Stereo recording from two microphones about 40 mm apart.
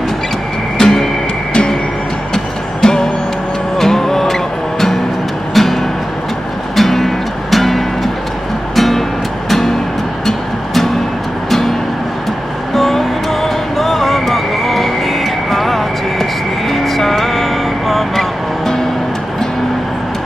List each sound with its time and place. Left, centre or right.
0.7 s music: centre
2.3 s music: centre
6.8 s music: centre
10.2 s music: centre
12.7 s music: centre